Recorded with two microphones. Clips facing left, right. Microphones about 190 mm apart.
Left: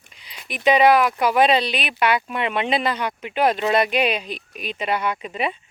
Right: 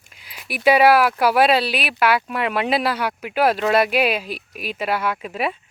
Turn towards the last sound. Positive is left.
turn(degrees=-5)  # may be behind; listen again after turning